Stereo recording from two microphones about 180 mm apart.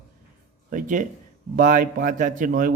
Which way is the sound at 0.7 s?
45° right (ahead or behind).